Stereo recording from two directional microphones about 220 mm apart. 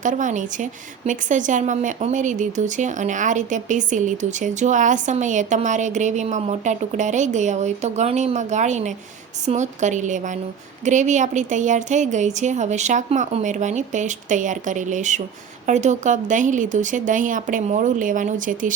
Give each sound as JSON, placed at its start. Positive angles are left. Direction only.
{"t": 0.0, "sound": "speech", "side_deg": -35}